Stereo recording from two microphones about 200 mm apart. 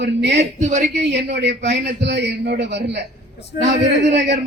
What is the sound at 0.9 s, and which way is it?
A man's voice, 60° right (ahead or behind).